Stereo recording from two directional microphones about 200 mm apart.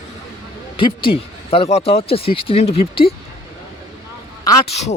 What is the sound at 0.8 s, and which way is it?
Speech, 25° left (ahead or behind).